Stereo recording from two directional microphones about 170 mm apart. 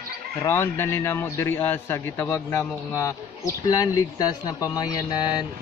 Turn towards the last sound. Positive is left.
turn(degrees=25)  # may be behind; listen again after turning